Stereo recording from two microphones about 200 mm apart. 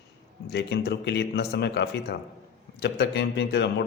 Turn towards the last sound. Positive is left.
turn(degrees=60)  # may be behind; listen again after turning